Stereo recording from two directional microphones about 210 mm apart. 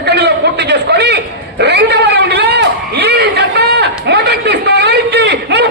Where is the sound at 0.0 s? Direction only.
50° right (ahead or behind).